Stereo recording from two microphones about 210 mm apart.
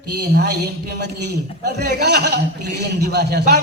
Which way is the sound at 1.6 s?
50° right (ahead or behind).